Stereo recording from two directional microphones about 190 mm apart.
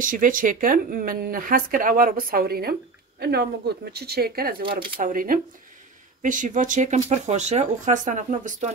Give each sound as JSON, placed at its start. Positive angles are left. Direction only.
{"t": 0.0, "sound": "speech", "side_deg": -45}